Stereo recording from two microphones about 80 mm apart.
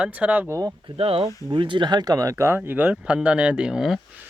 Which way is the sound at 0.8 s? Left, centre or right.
Right.